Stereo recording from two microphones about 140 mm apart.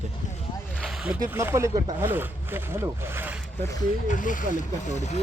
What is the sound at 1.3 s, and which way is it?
Speech, 15° right (ahead or behind).